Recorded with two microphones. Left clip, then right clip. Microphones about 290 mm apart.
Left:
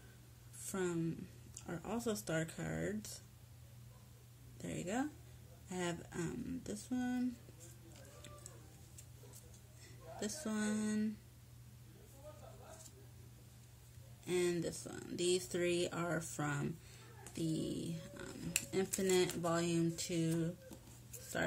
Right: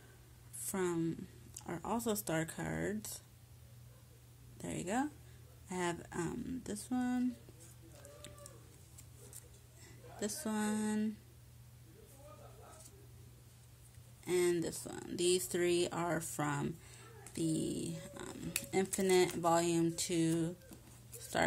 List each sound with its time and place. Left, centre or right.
0.6 s speech: centre
4.6 s speech: centre
10.2 s a sound: centre
14.2 s speech: right